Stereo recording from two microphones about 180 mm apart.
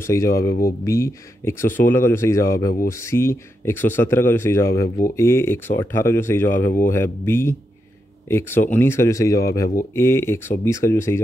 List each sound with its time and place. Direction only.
0.0 s speech: 15° left (ahead or behind)